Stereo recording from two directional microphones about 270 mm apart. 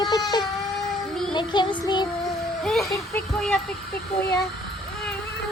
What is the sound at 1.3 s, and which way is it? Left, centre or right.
Child singing, centre.